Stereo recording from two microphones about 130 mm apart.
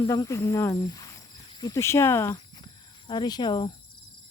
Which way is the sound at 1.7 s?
20° left (ahead or behind).